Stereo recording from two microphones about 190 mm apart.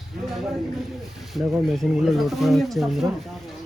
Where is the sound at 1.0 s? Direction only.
Centre (ahead or behind).